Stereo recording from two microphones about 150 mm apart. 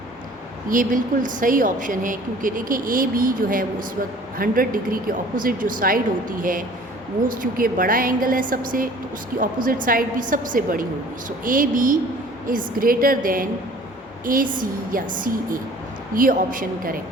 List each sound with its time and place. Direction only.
0.7 s a woman's voice: 60° right (ahead or behind)
16.1 s speech: 65° right (ahead or behind)